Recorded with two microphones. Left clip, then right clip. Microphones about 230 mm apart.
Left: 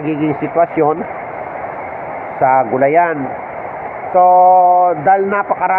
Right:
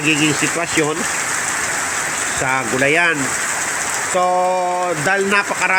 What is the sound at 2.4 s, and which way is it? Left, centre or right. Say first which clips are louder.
Speech: left 7 dB; centre.